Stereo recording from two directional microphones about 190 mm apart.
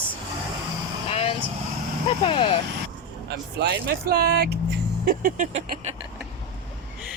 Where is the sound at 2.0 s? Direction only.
30° left (ahead or behind).